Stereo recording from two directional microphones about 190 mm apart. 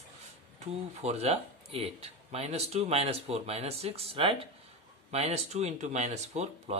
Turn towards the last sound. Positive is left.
turn(degrees=-35)  # may be behind; listen again after turning